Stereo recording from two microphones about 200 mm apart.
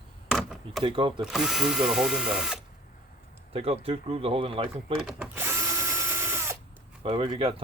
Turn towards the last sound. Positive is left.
turn(degrees=-25)  # may be behind; listen again after turning